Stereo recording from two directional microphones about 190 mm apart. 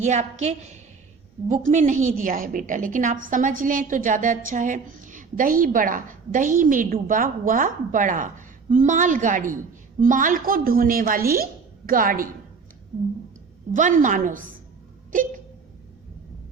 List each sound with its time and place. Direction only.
0.0 s a woman's voice: 35° right (ahead or behind)
13.7 s a woman's voice: 40° right (ahead or behind)